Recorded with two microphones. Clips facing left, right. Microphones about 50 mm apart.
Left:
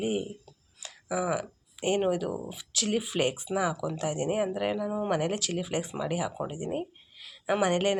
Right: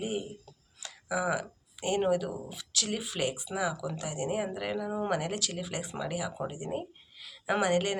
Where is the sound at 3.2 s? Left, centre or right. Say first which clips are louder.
Left 2 dB; left.